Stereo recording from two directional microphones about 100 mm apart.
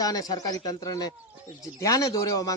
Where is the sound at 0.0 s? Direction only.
40° left (ahead or behind).